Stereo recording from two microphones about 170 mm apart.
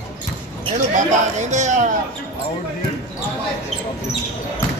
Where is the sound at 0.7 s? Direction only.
45° right (ahead or behind).